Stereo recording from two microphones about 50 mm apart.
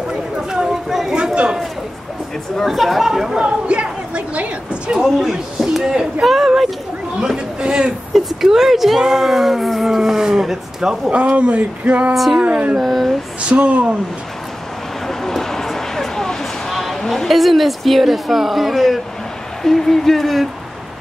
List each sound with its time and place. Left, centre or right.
0.5 s a sound: centre
1.1 s a sound: centre
2.6 s a woman's voice: centre
3.3 s speech: centre
5.6 s a woman's voice: centre
7.2 s speech: centre
8.1 s speech: centre
11.1 s speech: right
12.1 s a woman's voice: centre
12.4 s speech: right
12.7 s a woman's voice: centre
13.5 s speech: right
15.0 s a sound: centre
17.0 s a woman's voice: centre